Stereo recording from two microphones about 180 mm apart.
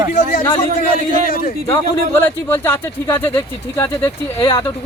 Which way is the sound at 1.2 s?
55° left (ahead or behind).